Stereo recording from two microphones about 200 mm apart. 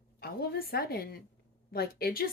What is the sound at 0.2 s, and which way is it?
Speech, 50° left (ahead or behind).